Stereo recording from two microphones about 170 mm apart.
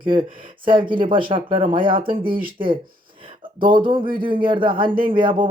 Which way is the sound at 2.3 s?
55° right (ahead or behind).